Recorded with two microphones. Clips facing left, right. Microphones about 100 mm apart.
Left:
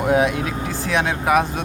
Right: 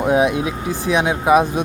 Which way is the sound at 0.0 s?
20° right (ahead or behind).